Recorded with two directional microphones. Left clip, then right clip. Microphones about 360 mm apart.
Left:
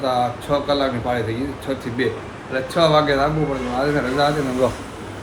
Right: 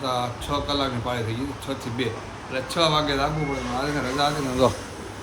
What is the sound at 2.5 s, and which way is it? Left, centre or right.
Speech, centre.